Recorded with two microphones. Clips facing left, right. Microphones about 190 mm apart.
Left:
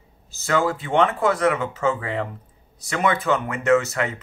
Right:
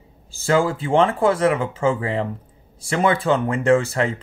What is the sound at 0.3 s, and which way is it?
Speech, 30° right (ahead or behind).